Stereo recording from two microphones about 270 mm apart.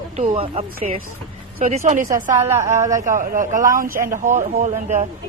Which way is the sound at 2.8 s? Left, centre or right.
Centre.